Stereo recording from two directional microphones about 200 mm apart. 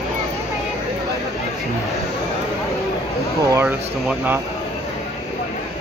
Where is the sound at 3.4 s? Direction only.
15° right (ahead or behind).